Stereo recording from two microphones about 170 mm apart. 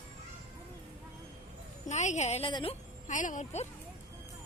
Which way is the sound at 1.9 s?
45° left (ahead or behind).